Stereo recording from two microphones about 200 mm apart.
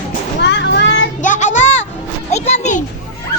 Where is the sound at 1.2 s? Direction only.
40° left (ahead or behind).